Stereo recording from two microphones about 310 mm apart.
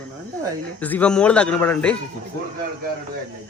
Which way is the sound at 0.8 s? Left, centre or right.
Centre.